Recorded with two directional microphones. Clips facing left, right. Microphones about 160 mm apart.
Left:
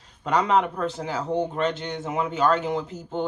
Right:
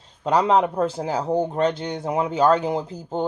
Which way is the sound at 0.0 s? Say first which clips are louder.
Right 4 dB; 30° right (ahead or behind).